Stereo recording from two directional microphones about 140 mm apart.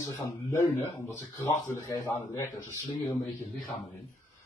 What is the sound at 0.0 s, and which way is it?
Speech, 20° left (ahead or behind).